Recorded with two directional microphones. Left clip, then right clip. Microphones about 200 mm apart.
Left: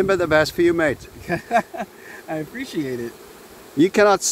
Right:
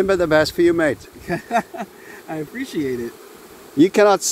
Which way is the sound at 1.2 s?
15° left (ahead or behind).